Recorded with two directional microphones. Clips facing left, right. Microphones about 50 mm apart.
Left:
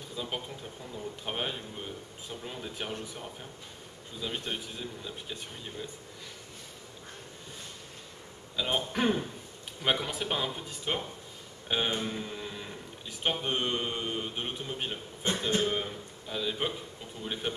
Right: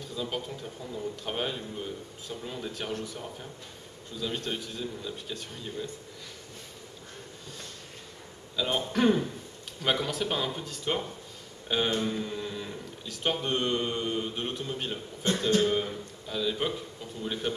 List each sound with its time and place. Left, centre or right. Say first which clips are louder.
0.1 s speech: right 3 dB; centre
8.5 s speech: right 2 dB; centre